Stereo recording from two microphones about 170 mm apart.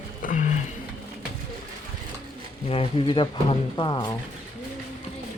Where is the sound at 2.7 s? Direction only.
35° left (ahead or behind).